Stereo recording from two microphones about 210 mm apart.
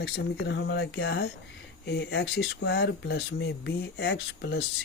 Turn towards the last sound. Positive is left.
turn(degrees=55)  # may be behind; listen again after turning